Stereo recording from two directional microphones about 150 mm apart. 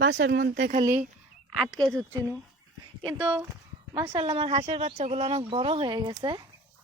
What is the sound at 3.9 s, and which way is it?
Speech, 35° right (ahead or behind).